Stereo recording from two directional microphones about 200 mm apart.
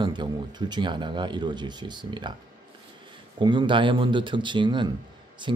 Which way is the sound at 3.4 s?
25° right (ahead or behind).